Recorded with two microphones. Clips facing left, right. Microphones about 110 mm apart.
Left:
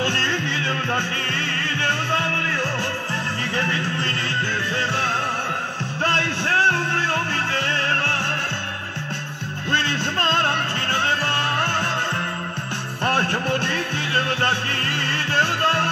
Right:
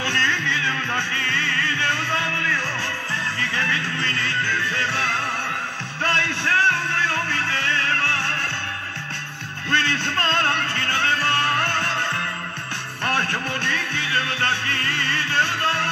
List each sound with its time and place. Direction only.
0.0 s music: 30° left (ahead or behind)
6.1 s music: 30° left (ahead or behind)
9.7 s music: 25° left (ahead or behind)
13.0 s music: 30° left (ahead or behind)